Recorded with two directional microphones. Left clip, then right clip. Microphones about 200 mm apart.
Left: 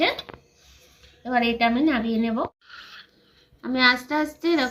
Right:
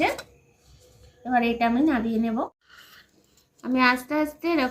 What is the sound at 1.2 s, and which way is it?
A woman's voice, 25° left (ahead or behind).